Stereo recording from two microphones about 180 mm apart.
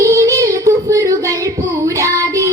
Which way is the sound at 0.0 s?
15° right (ahead or behind).